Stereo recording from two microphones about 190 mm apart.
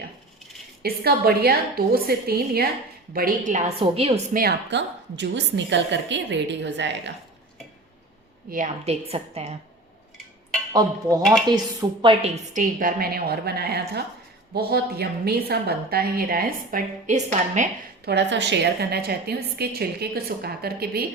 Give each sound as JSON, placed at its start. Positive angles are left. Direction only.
{"t": 0.8, "sound": "a woman's voice", "side_deg": -55}
{"t": 4.4, "sound": "a woman's voice", "side_deg": -60}
{"t": 8.4, "sound": "a woman's voice", "side_deg": -45}
{"t": 10.7, "sound": "a woman's voice", "side_deg": -20}
{"t": 12.2, "sound": "a woman's voice", "side_deg": -40}
{"t": 18.0, "sound": "a woman's voice", "side_deg": -65}